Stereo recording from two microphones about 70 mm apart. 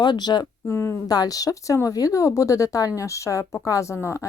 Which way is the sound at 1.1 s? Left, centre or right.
Left.